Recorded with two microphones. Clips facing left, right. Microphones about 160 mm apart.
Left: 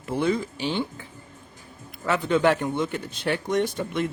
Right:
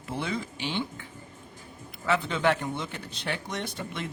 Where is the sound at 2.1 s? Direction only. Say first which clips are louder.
Left 4 dB; 45° left (ahead or behind).